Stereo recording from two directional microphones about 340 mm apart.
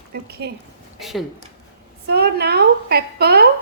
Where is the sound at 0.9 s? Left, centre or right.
Centre.